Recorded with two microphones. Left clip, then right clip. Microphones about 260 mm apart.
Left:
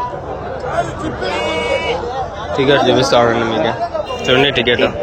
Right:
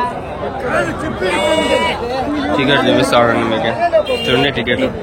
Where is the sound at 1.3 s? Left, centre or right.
Right.